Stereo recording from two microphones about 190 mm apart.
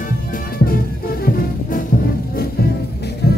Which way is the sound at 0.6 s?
50° left (ahead or behind).